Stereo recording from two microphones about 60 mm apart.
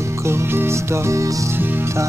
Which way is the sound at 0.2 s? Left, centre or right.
Right.